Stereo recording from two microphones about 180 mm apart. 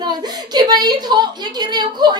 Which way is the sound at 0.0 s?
25° right (ahead or behind).